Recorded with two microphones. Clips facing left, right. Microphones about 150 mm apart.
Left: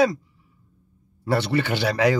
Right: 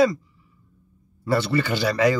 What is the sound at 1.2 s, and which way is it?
Speech, 65° left (ahead or behind).